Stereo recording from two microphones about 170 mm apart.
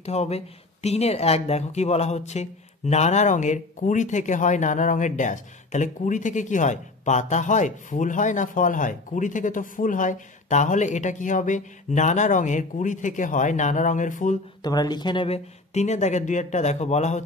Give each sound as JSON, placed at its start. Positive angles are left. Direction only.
{"t": 0.0, "sound": "speech", "side_deg": 40}
{"t": 14.6, "sound": "speech", "side_deg": 25}